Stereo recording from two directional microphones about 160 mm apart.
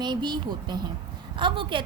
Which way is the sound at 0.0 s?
25° right (ahead or behind).